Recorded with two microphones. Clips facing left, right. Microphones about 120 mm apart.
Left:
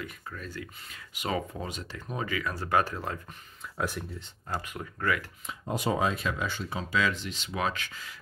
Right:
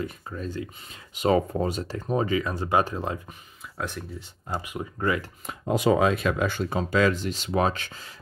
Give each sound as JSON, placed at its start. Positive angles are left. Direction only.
{"t": 0.0, "sound": "speech", "side_deg": -25}
{"t": 3.7, "sound": "speech", "side_deg": 5}
{"t": 4.5, "sound": "speech", "side_deg": -15}
{"t": 5.7, "sound": "speech", "side_deg": -90}